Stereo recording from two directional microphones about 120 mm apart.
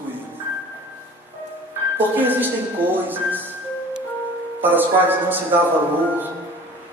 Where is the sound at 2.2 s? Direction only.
15° right (ahead or behind).